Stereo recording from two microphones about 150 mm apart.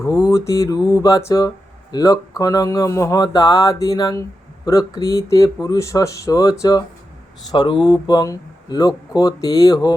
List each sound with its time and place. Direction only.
0.0 s speech: 20° left (ahead or behind)